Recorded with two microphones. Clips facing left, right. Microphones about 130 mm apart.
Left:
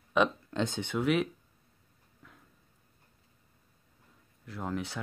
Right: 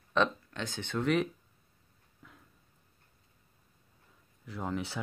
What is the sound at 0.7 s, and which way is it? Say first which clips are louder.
Speech: right 1 dB; 10° left (ahead or behind).